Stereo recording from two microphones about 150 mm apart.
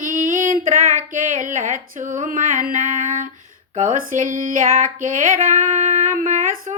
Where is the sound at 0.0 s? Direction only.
60° right (ahead or behind).